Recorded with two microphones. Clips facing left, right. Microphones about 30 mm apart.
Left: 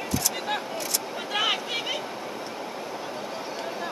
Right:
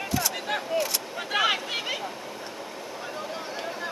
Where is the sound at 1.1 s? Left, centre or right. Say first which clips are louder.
Right 2 dB; centre.